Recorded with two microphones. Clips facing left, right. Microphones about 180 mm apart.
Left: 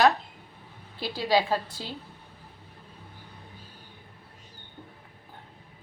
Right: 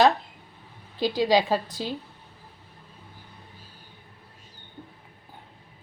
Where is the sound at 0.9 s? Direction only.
15° right (ahead or behind).